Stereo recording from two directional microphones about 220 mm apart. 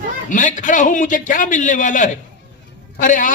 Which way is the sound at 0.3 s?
35° left (ahead or behind).